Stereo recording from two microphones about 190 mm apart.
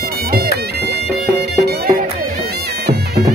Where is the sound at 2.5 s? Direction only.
60° right (ahead or behind).